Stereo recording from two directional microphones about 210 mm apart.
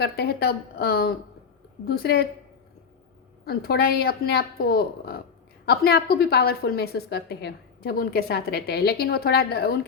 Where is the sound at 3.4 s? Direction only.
50° left (ahead or behind).